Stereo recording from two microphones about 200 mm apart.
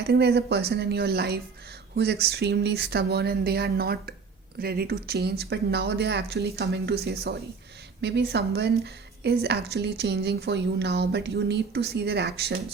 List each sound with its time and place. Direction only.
0.0 s a woman's voice: 55° right (ahead or behind)